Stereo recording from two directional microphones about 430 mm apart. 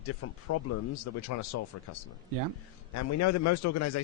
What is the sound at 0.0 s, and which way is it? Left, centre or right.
A man's voice, left.